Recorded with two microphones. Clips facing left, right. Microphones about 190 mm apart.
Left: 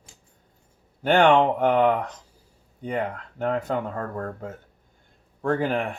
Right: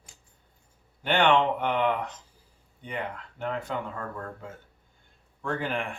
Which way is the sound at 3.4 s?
40° left (ahead or behind).